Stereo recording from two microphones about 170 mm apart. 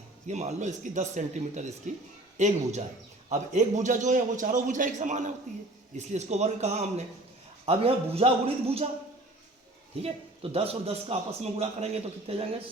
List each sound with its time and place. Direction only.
0.3 s a man's voice: 40° right (ahead or behind)
10.0 s a man's voice: 35° right (ahead or behind)